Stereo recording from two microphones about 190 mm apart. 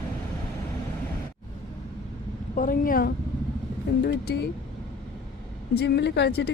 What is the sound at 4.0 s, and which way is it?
Speech, 55° left (ahead or behind).